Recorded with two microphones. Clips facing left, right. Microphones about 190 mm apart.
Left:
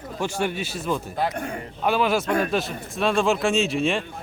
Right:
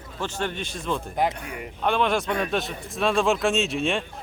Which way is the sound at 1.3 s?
50° left (ahead or behind).